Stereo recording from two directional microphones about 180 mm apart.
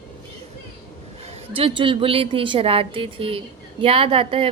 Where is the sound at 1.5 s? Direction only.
30° right (ahead or behind).